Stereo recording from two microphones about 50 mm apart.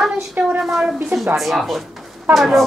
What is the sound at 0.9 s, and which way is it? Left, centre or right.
Speech, centre.